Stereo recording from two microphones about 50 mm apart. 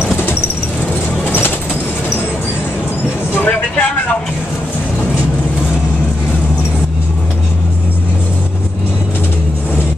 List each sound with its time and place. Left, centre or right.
3.4 s vehicle: left